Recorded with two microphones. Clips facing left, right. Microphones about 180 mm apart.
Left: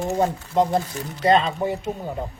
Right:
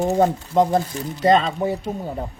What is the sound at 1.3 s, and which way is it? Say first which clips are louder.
Speech: left 1 dB; 40° right (ahead or behind).